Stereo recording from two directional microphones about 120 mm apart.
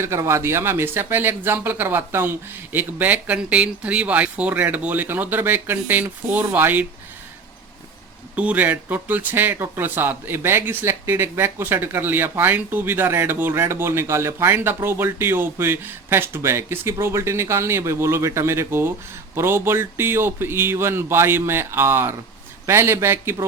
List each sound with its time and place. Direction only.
0.0 s speech: 20° right (ahead or behind)
8.4 s speech: 10° right (ahead or behind)